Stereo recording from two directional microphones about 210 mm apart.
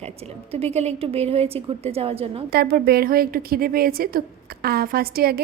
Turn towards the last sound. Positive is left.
turn(degrees=-45)  # may be behind; listen again after turning